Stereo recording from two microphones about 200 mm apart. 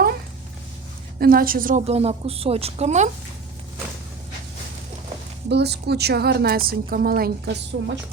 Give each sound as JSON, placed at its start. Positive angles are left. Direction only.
{"t": 1.2, "sound": "a woman's voice", "side_deg": -45}
{"t": 5.5, "sound": "a woman's voice", "side_deg": -55}